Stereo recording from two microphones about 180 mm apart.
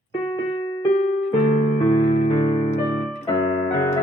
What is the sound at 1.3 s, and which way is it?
Keyboard, 45° left (ahead or behind).